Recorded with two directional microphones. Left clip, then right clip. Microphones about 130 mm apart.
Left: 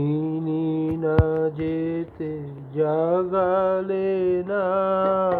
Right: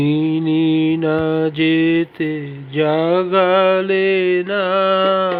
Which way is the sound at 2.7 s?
30° right (ahead or behind).